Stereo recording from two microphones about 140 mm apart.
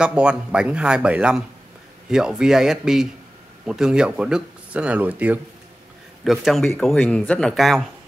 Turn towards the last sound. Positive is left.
turn(degrees=0)  # may be behind; listen again after turning